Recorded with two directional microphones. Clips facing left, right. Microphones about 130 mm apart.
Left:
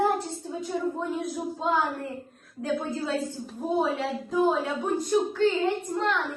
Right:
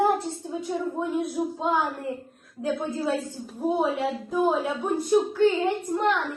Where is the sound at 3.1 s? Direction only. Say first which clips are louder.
Right 2 dB; 10° right (ahead or behind).